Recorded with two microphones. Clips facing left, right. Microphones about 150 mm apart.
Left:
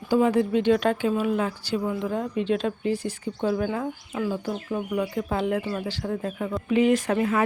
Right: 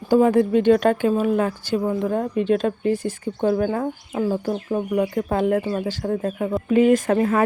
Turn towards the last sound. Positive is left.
turn(degrees=-45)  # may be behind; listen again after turning